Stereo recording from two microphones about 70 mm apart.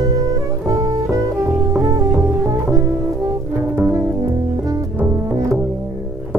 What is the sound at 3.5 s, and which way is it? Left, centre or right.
Music, right.